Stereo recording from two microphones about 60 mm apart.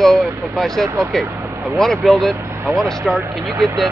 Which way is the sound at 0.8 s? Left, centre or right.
Right.